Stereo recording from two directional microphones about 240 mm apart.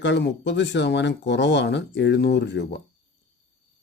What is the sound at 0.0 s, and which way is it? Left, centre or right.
Speech, left.